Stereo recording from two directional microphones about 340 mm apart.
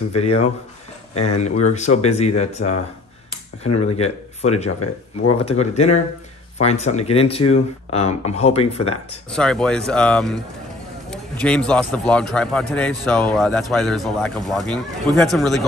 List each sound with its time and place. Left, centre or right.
0.1 s speech: centre
1.4 s speech: centre
3.8 s speech: centre
9.3 s a man's voice: centre